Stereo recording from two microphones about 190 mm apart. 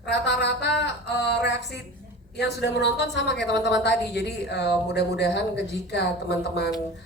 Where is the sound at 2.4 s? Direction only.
65° left (ahead or behind).